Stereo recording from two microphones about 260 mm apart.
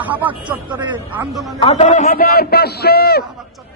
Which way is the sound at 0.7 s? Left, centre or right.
Centre.